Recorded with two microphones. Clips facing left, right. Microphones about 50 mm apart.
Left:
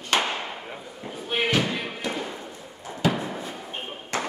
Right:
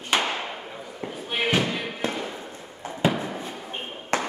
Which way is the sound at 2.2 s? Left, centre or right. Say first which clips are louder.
Even; centre.